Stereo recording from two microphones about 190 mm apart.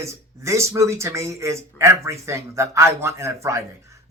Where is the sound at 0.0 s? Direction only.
15° right (ahead or behind).